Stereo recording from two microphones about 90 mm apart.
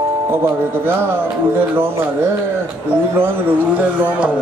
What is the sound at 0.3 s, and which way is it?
Speech, 25° right (ahead or behind).